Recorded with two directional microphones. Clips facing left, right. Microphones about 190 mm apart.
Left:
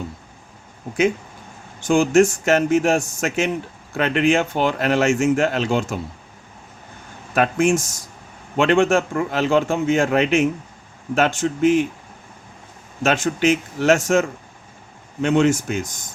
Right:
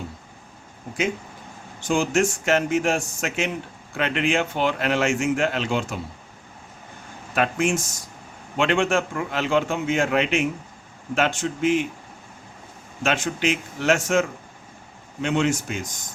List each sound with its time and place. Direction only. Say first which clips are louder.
1.9 s speech: left 6 dB; 50° left (ahead or behind)
7.3 s speech: left 5 dB; 45° left (ahead or behind)
13.0 s speech: left 5 dB; 45° left (ahead or behind)